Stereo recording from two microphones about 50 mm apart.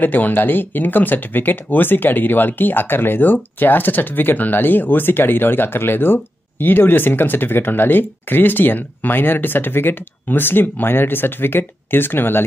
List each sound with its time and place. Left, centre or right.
0.0 s speech: left